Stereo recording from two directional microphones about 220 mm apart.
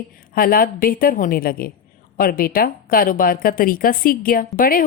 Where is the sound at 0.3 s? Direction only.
40° left (ahead or behind).